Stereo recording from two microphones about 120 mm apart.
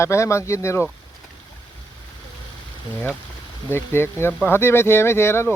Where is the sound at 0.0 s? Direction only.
25° left (ahead or behind).